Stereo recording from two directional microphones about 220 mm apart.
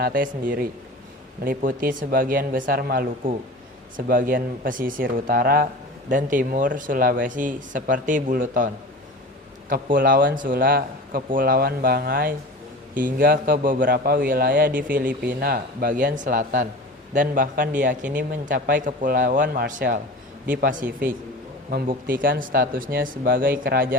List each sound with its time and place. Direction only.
0.0 s speech: 40° right (ahead or behind)
14.7 s speech: 5° right (ahead or behind)
15.4 s speech: 45° right (ahead or behind)
18.0 s speech: 5° right (ahead or behind)
18.3 s speech: 40° right (ahead or behind)